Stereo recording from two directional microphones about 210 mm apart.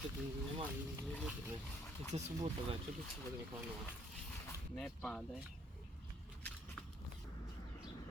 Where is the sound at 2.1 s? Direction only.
30° right (ahead or behind).